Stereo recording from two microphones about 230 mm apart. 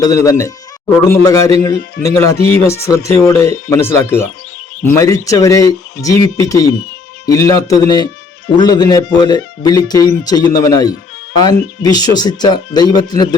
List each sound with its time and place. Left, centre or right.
0.0 s speech: centre